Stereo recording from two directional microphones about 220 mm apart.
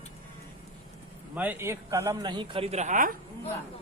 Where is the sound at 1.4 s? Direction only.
10° right (ahead or behind); by 3.2 s 35° right (ahead or behind).